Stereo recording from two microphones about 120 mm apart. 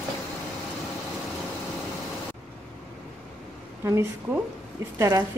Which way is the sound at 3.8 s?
25° right (ahead or behind).